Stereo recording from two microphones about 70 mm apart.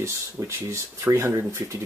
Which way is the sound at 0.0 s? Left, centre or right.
Right.